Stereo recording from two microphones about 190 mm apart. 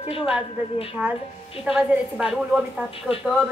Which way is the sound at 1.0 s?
10° right (ahead or behind).